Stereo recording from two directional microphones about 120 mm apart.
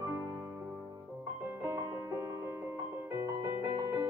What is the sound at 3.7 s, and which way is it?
Music, 35° right (ahead or behind).